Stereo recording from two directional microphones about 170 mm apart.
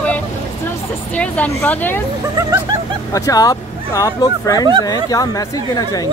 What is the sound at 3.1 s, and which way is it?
Speech, 20° left (ahead or behind).